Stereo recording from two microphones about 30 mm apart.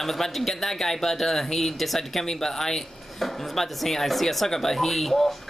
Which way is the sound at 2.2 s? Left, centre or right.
Centre.